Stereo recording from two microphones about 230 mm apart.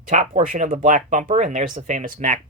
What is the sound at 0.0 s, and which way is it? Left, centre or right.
Speech, right.